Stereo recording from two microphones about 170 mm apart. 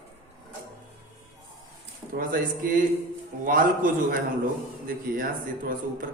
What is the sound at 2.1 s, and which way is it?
Speech, 55° right (ahead or behind).